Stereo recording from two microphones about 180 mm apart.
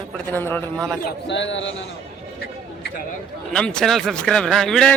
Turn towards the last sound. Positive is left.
turn(degrees=5)  # may be behind; listen again after turning